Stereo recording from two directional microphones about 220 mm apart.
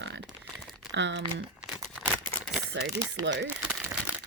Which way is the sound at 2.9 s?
55° right (ahead or behind).